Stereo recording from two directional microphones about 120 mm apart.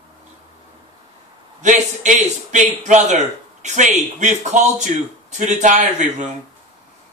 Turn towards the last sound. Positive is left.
turn(degrees=-85)